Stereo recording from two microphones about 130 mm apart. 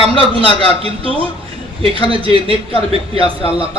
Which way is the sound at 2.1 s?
45° right (ahead or behind).